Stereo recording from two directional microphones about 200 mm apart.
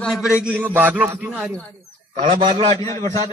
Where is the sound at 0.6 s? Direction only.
10° right (ahead or behind).